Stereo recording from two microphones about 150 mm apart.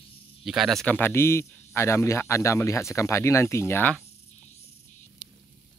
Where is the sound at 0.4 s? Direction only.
Centre (ahead or behind); by 3.9 s 15° left (ahead or behind).